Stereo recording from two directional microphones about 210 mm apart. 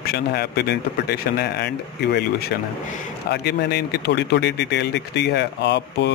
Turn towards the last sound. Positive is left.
turn(degrees=55)  # may be behind; listen again after turning